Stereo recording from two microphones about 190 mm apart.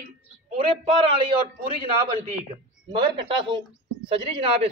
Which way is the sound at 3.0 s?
25° right (ahead or behind).